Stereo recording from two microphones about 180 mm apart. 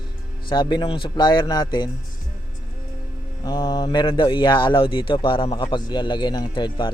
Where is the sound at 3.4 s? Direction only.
20° left (ahead or behind).